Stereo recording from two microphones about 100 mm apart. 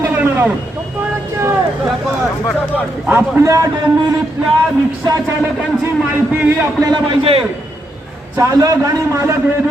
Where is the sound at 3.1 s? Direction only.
25° right (ahead or behind).